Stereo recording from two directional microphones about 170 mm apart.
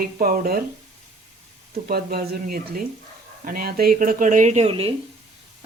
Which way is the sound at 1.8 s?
65° right (ahead or behind).